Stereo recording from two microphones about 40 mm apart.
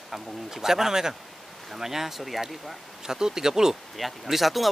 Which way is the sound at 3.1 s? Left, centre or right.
Centre.